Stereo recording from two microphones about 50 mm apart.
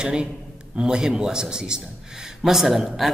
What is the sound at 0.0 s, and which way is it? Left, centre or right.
A man's voice, centre.